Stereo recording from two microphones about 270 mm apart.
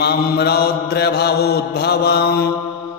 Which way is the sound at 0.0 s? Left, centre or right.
Left.